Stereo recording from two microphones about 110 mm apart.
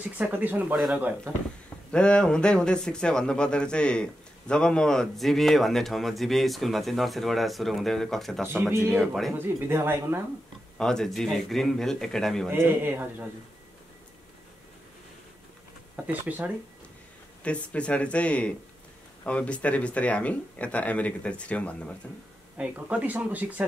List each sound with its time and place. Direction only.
0.0 s speech: 15° right (ahead or behind)
1.9 s speech: 10° left (ahead or behind)
8.5 s a man's voice: 20° right (ahead or behind)
8.9 s speech: centre (ahead or behind)
9.7 s a man's voice: 25° right (ahead or behind)
10.8 s speech: 5° left (ahead or behind)
12.4 s a man's voice: 20° right (ahead or behind)
16.1 s speech: 15° right (ahead or behind)
17.4 s speech: 10° left (ahead or behind)
22.6 s speech: 10° right (ahead or behind)